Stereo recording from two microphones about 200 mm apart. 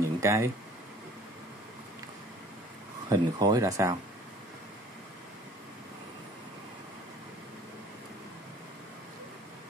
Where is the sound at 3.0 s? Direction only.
20° right (ahead or behind).